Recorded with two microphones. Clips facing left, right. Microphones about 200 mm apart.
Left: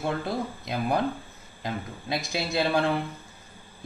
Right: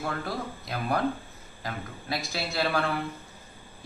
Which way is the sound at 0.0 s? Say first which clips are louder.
Left 4 dB; 20° left (ahead or behind).